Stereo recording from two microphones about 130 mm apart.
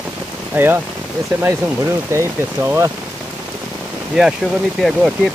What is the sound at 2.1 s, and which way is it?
Speech, 20° right (ahead or behind).